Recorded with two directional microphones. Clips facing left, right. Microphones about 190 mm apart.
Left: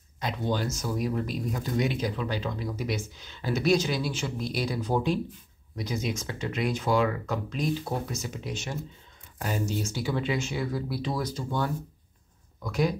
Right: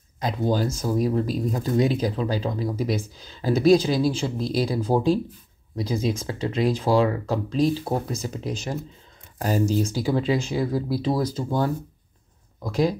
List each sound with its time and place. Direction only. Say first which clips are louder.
0.2 s speech: right 6 dB; 35° right (ahead or behind)